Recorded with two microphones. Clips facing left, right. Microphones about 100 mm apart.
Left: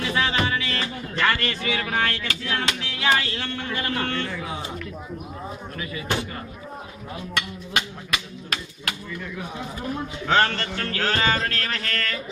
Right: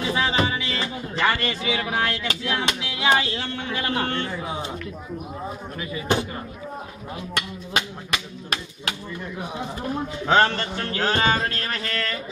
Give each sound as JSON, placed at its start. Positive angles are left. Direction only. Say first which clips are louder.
{"t": 0.0, "sound": "music", "louder": "right 1 dB", "side_deg": -20}
{"t": 2.2, "sound": "a man's voice", "louder": "right 2 dB", "side_deg": -20}
{"t": 5.8, "sound": "a man's voice", "louder": "right 4 dB", "side_deg": -20}
{"t": 7.3, "sound": "a man's voice", "louder": "even", "side_deg": -25}